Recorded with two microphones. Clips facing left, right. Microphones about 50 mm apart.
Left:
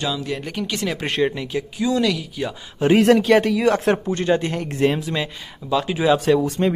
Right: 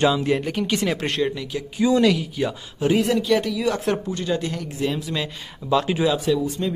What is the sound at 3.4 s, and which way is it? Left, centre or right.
Speech, left.